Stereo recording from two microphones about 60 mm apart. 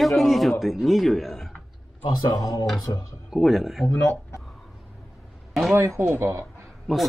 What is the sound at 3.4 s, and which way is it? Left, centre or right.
Speech, centre.